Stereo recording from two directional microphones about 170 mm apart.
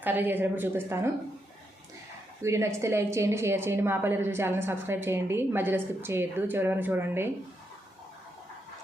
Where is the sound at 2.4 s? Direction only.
15° right (ahead or behind).